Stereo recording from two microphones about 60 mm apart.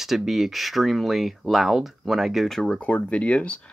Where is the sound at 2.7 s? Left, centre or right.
Left.